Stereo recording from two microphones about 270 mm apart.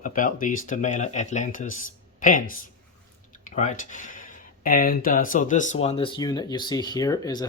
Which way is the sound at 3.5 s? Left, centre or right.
Left.